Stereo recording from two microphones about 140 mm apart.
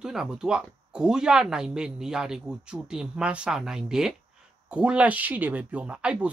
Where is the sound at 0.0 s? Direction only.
5° right (ahead or behind).